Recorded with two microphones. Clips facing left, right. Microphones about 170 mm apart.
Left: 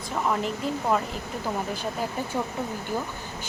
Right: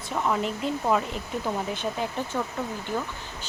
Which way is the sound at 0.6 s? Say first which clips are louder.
Right 1 dB; centre (ahead or behind).